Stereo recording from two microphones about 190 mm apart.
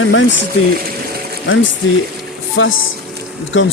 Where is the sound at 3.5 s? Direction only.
75° left (ahead or behind).